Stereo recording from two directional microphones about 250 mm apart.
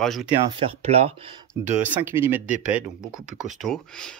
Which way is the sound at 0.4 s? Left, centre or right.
Right.